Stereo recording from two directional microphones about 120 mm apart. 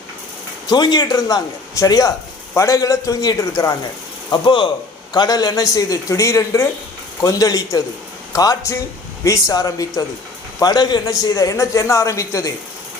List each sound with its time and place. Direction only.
0.7 s a man's voice: 35° left (ahead or behind)